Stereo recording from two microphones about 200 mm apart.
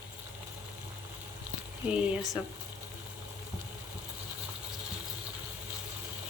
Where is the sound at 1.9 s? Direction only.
5° right (ahead or behind).